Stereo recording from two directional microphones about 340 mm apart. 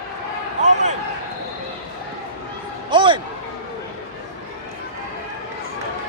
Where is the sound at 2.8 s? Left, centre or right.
Centre.